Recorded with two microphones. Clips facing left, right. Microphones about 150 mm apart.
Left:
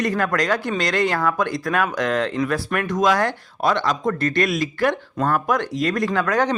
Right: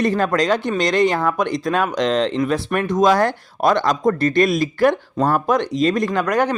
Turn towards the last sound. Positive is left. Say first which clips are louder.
# right 2 dB
turn(degrees=-15)  # may be behind; listen again after turning